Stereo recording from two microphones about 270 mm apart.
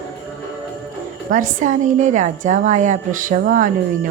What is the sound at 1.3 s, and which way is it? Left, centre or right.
A woman's voice, right.